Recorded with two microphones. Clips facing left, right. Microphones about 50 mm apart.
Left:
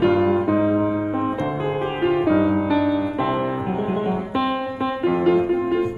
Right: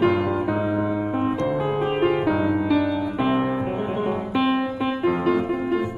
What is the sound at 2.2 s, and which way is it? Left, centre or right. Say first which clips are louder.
Music: left 3 dB; centre.